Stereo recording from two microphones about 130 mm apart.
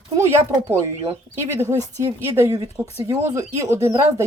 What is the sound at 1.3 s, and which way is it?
Speech, 20° right (ahead or behind).